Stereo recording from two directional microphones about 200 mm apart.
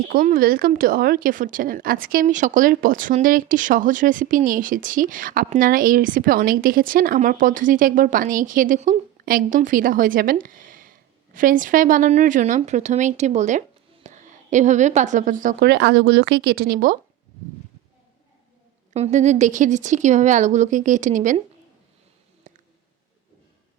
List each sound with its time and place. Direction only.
0.1 s a woman's voice: 45° right (ahead or behind)
15.6 s speech: 60° right (ahead or behind)
18.9 s speech: 35° right (ahead or behind)
22.5 s a sound: 40° right (ahead or behind)